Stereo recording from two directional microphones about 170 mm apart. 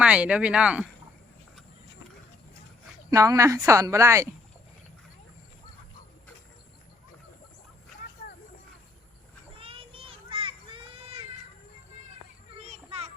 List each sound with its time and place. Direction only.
0.0 s speech: 5° right (ahead or behind)
3.1 s speech: 20° right (ahead or behind)
9.6 s children playing: 30° right (ahead or behind)
12.6 s children playing: 40° right (ahead or behind)